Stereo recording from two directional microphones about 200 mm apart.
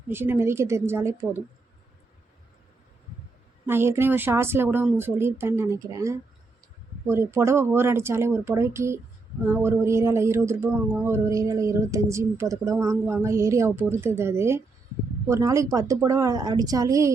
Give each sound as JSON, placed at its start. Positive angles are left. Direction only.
{"t": 0.1, "sound": "speech", "side_deg": -10}
{"t": 3.7, "sound": "speech", "side_deg": -10}